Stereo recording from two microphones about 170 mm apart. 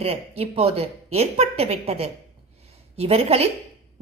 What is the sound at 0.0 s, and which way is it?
A woman's voice, 35° right (ahead or behind).